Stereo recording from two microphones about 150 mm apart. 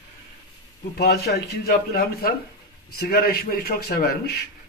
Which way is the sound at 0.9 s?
90° left.